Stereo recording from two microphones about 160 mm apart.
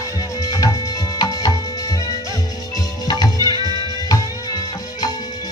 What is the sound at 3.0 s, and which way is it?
Music, 25° left (ahead or behind).